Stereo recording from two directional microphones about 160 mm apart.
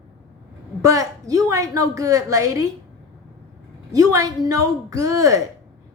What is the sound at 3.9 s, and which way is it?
A woman's voice, 20° right (ahead or behind).